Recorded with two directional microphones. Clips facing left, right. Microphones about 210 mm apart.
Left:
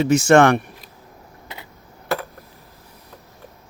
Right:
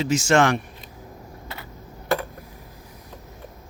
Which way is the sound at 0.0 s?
60° left (ahead or behind).